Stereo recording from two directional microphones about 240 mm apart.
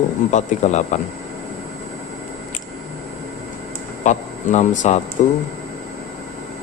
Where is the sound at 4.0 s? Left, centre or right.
Left.